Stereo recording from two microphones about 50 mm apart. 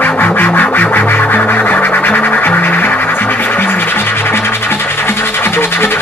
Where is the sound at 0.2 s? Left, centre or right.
Left.